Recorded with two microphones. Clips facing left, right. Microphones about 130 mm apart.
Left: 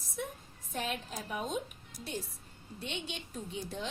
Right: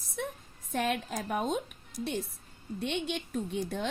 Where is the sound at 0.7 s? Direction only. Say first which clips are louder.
Right 6 dB; 60° right (ahead or behind).